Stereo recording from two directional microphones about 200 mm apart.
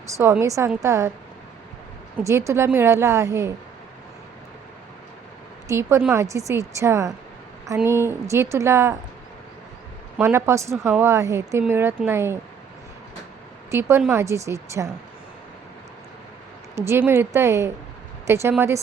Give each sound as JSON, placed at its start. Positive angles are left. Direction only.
{"t": 0.1, "sound": "a woman's voice", "side_deg": -15}
{"t": 2.1, "sound": "a woman's voice", "side_deg": -15}
{"t": 5.6, "sound": "a woman's voice", "side_deg": -15}
{"t": 10.2, "sound": "a woman's voice", "side_deg": -10}
{"t": 13.7, "sound": "a woman's voice", "side_deg": -15}
{"t": 16.7, "sound": "a woman's voice", "side_deg": -15}